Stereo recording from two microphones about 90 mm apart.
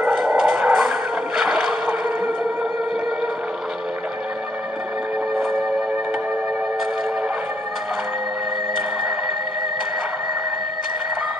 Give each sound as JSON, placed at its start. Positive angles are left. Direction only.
{"t": 0.1, "sound": "dog", "side_deg": -10}
{"t": 5.3, "sound": "music", "side_deg": -5}